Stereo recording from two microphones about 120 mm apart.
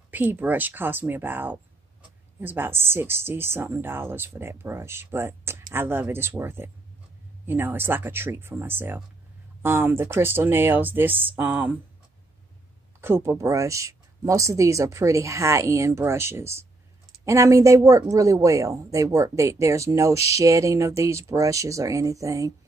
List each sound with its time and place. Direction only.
0.1 s speech: 15° right (ahead or behind)
13.0 s speech: 20° right (ahead or behind)